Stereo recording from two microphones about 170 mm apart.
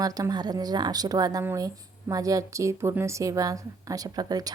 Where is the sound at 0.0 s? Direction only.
20° right (ahead or behind).